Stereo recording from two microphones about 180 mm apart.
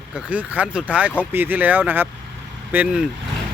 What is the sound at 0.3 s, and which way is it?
Speech, 10° right (ahead or behind).